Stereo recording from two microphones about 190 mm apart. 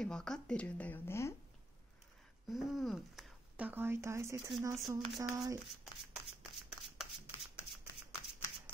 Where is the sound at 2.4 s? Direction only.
Centre (ahead or behind); by 5.6 s 15° right (ahead or behind).